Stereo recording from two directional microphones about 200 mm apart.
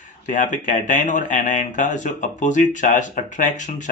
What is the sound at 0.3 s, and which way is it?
Speech, 40° left (ahead or behind).